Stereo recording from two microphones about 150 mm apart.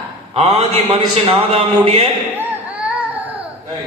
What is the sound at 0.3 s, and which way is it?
A man's voice, 35° right (ahead or behind).